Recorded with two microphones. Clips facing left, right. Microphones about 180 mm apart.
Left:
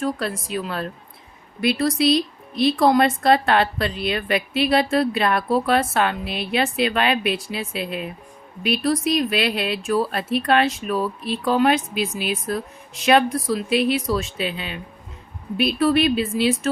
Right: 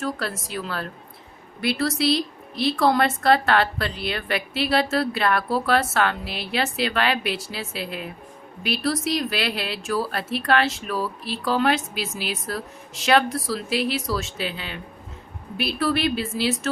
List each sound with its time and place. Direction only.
0.0 s speech: 20° left (ahead or behind)